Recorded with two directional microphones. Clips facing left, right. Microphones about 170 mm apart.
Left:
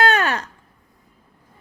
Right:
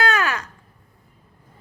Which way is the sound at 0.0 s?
30° left (ahead or behind).